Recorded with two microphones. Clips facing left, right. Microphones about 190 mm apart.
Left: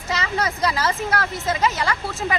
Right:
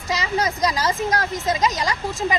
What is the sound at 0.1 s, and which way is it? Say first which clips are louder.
A woman's voice: right 1 dB; 10° right (ahead or behind).